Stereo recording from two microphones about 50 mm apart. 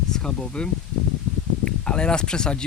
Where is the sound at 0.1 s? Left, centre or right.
Centre.